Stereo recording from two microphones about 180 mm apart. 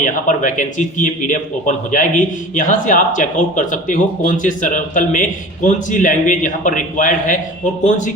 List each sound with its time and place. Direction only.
0.0 s a man's voice: 45° left (ahead or behind)